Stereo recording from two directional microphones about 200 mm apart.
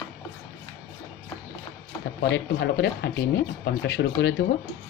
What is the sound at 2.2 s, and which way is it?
Speech, 60° left (ahead or behind).